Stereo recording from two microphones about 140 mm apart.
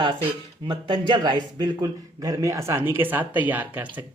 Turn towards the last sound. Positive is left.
turn(degrees=-10)  # may be behind; listen again after turning